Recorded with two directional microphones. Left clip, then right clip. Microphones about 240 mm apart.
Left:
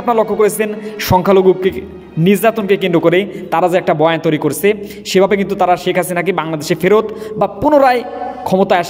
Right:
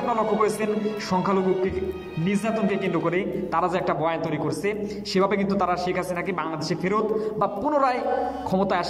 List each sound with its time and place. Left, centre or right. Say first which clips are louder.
0.1 s a man's voice: left 12 dB; left